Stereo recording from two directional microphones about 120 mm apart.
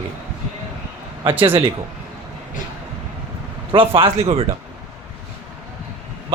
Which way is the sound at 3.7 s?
50° right (ahead or behind).